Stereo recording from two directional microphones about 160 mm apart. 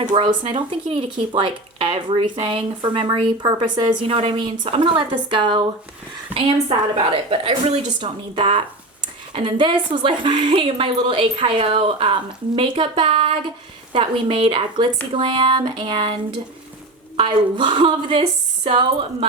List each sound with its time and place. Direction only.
0.0 s speech: 30° right (ahead or behind)
17.2 s speech: 30° right (ahead or behind)